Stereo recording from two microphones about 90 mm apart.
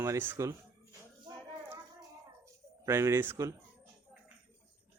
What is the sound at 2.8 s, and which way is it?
Speech, 30° right (ahead or behind).